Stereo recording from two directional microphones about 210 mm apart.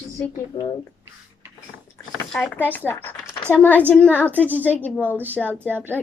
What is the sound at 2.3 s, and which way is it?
Speech, 5° left (ahead or behind).